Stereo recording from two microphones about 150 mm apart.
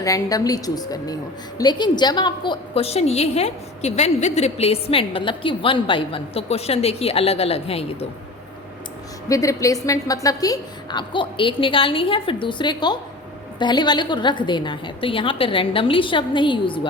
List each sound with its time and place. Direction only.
0.0 s a woman's voice: 25° left (ahead or behind); by 8.0 s 40° left (ahead or behind)
9.3 s a woman's voice: 20° left (ahead or behind)